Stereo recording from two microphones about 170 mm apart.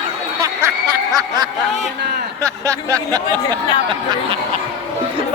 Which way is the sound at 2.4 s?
20° right (ahead or behind).